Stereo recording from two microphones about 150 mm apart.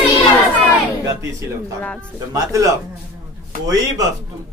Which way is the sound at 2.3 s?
20° right (ahead or behind).